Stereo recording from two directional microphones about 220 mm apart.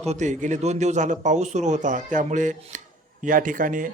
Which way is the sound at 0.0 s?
30° right (ahead or behind).